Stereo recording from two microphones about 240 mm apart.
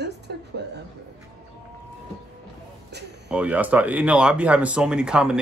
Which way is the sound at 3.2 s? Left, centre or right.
Centre.